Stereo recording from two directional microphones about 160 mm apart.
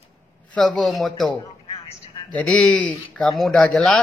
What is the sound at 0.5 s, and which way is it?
Speech, 5° left (ahead or behind).